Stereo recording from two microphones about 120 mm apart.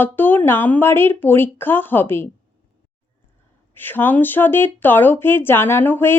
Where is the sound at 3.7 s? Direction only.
15° left (ahead or behind).